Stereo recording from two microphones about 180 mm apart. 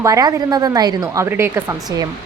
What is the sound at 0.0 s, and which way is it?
A woman's voice, 20° right (ahead or behind).